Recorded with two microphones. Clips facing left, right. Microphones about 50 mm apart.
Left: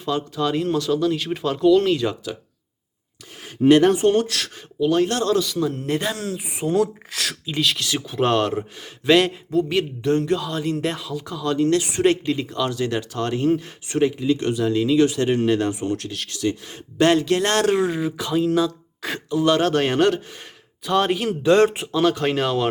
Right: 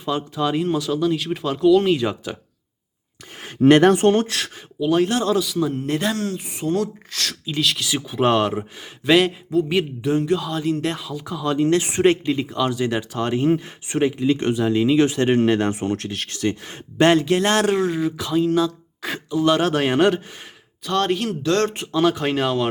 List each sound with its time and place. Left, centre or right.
0.0 s speech: centre
3.7 s speech: right
4.1 s speech: right
4.4 s speech: centre
4.8 s speech: centre; by 12.1 s right
12.2 s speech: centre; by 17.1 s right
17.1 s speech: centre
20.8 s a man's voice: centre